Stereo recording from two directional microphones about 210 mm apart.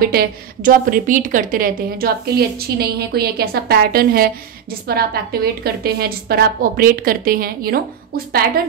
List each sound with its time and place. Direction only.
0.0 s a woman's voice: 45° right (ahead or behind)